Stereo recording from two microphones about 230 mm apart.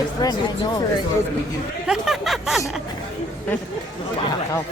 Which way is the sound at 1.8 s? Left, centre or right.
Centre.